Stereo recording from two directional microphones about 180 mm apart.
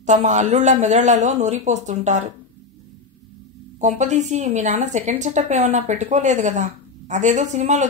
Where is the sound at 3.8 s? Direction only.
40° right (ahead or behind).